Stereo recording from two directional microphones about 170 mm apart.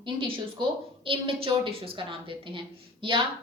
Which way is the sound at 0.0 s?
30° right (ahead or behind).